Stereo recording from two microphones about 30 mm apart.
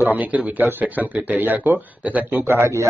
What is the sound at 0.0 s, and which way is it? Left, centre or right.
Speech, right.